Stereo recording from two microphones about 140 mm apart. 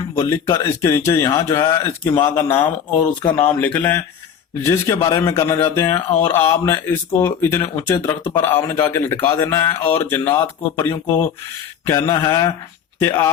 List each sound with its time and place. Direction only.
0.2 s a man's voice: 20° left (ahead or behind)
4.6 s a man's voice: 20° left (ahead or behind)